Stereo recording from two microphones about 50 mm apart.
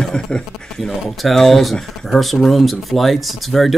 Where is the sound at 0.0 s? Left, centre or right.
Centre.